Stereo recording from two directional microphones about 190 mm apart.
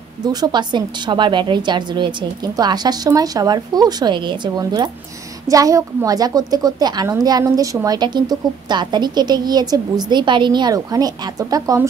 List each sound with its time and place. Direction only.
0.2 s a woman's voice: 20° right (ahead or behind)